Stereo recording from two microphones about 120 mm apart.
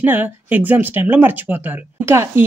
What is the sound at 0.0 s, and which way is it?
Speech, 15° right (ahead or behind).